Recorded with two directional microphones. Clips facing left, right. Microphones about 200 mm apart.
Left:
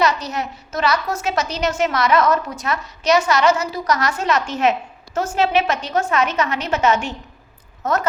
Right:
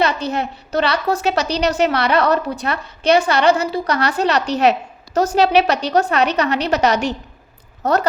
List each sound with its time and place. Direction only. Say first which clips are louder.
0.0 s a woman's voice: right 1 dB; 30° right (ahead or behind)